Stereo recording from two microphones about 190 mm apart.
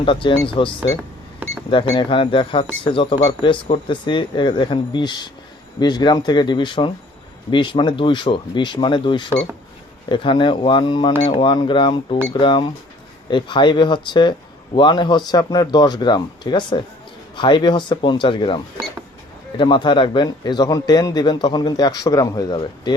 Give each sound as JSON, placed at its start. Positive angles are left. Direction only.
{"t": 0.0, "sound": "a man's voice", "side_deg": 25}